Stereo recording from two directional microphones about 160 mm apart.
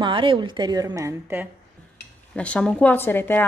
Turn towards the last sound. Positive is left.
turn(degrees=10)  # may be behind; listen again after turning